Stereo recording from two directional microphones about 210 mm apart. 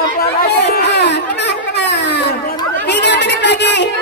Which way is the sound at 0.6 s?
55° left (ahead or behind).